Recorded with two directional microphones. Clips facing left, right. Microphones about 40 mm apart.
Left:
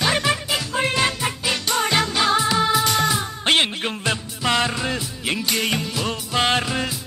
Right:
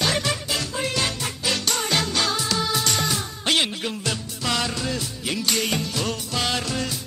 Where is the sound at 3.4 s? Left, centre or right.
Left.